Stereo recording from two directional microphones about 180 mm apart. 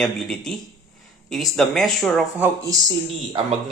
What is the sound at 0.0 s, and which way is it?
Speech, 5° left (ahead or behind).